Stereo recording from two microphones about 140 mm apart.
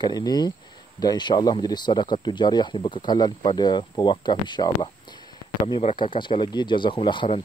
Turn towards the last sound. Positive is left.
turn(degrees=35)  # may be behind; listen again after turning